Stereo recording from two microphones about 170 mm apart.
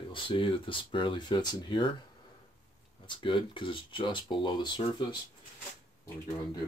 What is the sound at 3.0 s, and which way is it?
Speech, 30° left (ahead or behind).